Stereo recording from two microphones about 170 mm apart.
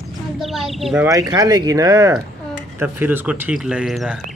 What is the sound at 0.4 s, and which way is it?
Speech, centre (ahead or behind).